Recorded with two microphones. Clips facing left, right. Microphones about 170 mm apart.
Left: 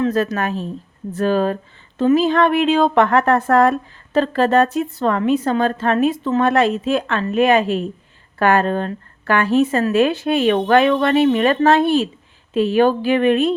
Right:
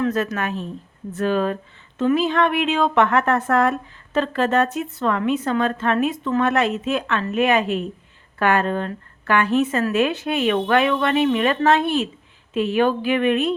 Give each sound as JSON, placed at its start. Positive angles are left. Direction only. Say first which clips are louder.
{"t": 0.0, "sound": "a woman's voice", "louder": "left 3 dB", "side_deg": 30}